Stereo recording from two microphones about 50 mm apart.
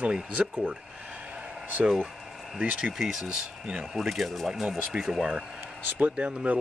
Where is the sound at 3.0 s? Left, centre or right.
Centre.